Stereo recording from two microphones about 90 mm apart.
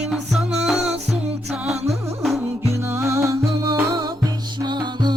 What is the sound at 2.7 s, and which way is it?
Music, 30° right (ahead or behind).